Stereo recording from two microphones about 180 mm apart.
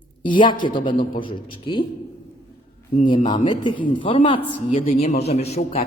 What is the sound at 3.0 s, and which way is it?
A man's voice, 30° left (ahead or behind).